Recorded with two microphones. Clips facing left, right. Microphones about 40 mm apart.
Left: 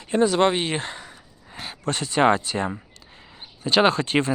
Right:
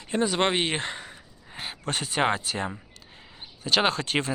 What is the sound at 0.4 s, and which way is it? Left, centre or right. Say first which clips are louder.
Speech: left 3 dB; right.